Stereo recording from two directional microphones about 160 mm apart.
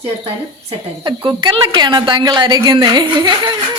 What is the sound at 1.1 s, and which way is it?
A woman's voice, 30° right (ahead or behind).